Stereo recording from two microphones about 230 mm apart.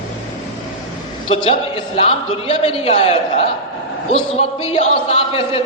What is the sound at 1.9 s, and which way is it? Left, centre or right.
A man's voice, left.